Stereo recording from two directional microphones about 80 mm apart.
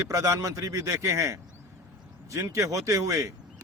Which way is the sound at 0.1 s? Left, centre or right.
Right.